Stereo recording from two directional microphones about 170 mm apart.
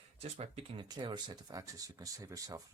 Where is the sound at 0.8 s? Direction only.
25° right (ahead or behind).